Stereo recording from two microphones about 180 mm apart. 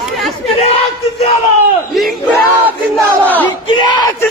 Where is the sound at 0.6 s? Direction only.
35° left (ahead or behind).